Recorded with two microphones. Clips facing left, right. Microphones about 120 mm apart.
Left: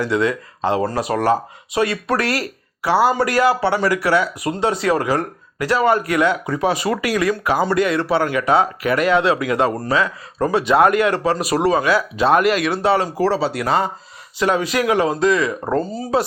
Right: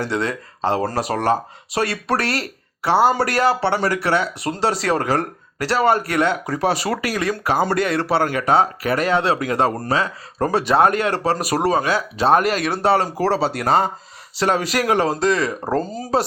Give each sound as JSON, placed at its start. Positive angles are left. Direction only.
{"t": 0.0, "sound": "speech", "side_deg": -30}